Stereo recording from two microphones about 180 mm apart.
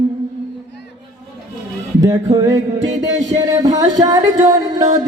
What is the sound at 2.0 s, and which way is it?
Music, 20° right (ahead or behind).